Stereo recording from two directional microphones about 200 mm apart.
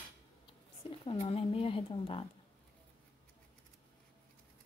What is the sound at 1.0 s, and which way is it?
Speech, 30° left (ahead or behind).